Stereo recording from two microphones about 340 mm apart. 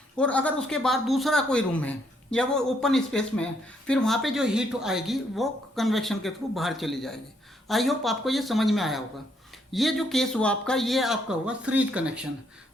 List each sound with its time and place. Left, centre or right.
0.2 s speech: centre